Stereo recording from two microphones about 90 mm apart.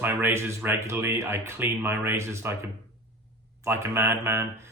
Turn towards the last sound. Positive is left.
turn(degrees=-25)  # may be behind; listen again after turning